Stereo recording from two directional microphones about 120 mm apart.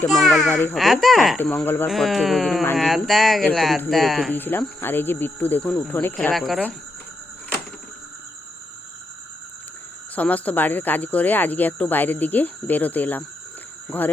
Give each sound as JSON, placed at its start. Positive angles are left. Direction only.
{"t": 0.1, "sound": "speech", "side_deg": 0}
{"t": 1.4, "sound": "speech", "side_deg": 10}
{"t": 1.9, "sound": "speech", "side_deg": 0}
{"t": 4.3, "sound": "speech", "side_deg": 15}
{"t": 6.3, "sound": "speech", "side_deg": 0}
{"t": 10.2, "sound": "speech", "side_deg": 10}